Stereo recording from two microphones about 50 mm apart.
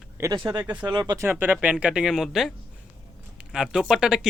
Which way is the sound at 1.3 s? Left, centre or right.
Right.